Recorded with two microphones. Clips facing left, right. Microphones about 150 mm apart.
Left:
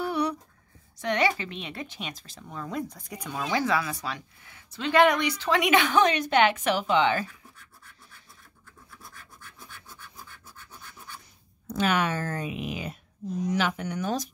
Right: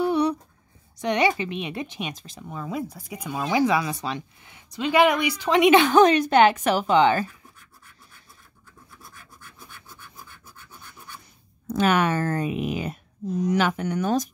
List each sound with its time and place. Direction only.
0.0 s a sound: 20° right (ahead or behind)
0.9 s speech: 15° right (ahead or behind); by 7.2 s 40° right (ahead or behind)
11.6 s speech: 50° right (ahead or behind)